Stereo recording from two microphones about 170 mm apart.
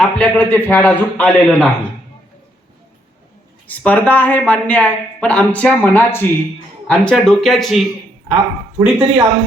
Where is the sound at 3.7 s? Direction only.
10° left (ahead or behind); by 9.2 s 10° right (ahead or behind).